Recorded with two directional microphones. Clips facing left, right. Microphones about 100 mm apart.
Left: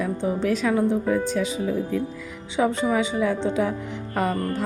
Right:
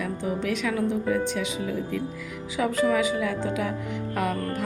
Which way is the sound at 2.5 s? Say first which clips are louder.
Left 1 dB; 25° left (ahead or behind).